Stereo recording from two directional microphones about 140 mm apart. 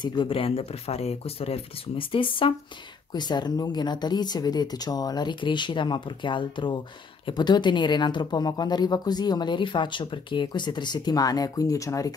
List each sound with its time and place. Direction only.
0.0 s speech: 35° left (ahead or behind)